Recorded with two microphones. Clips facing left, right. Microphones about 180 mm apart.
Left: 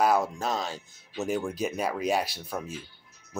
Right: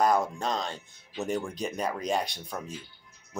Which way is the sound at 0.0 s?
5° left (ahead or behind).